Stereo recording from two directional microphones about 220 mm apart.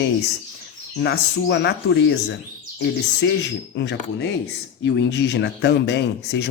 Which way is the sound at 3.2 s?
50° left (ahead or behind).